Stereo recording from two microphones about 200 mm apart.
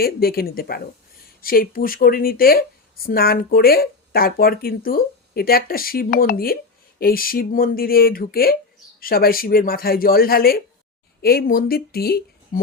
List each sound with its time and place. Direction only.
0.0 s speech: 50° left (ahead or behind)